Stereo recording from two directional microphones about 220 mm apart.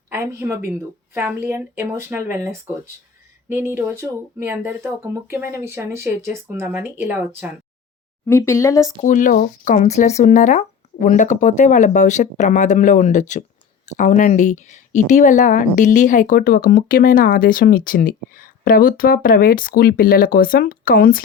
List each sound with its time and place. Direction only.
0.1 s speech: 10° right (ahead or behind)
8.3 s speech: 10° left (ahead or behind)
9.0 s a woman's voice: 35° left (ahead or behind)